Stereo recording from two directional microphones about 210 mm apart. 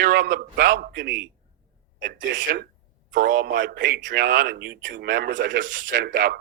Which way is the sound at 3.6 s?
40° right (ahead or behind).